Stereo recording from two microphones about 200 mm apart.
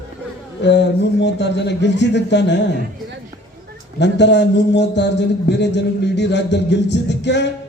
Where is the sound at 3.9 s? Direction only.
60° left (ahead or behind).